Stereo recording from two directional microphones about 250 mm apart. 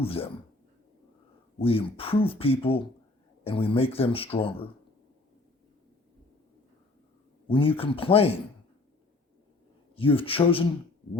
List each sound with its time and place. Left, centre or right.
0.0 s speech: left
1.5 s speech: left
7.5 s speech: left
9.9 s speech: left